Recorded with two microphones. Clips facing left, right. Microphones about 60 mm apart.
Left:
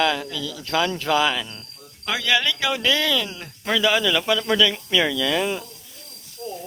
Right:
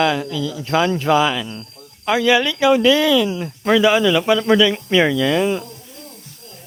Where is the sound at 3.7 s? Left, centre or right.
Right.